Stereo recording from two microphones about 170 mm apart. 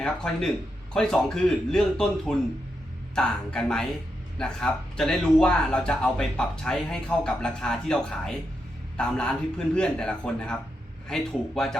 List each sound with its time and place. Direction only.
0.0 s speech: 5° left (ahead or behind)